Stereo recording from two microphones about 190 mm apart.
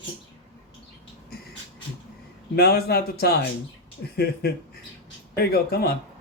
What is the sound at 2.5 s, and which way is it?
Speech, 55° left (ahead or behind).